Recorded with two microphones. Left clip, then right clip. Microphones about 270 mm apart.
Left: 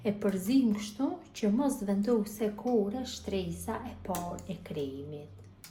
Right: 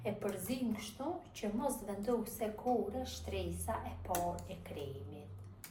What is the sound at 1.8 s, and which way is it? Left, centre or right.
A woman's voice, left.